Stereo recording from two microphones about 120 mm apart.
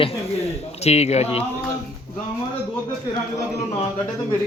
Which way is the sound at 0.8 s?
65° left (ahead or behind).